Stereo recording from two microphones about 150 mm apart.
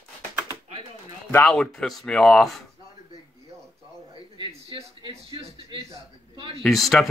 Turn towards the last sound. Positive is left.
turn(degrees=0)  # may be behind; listen again after turning